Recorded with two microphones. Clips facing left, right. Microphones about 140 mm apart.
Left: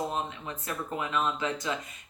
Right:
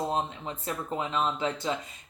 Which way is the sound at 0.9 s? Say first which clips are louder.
Right 1 dB; 25° right (ahead or behind).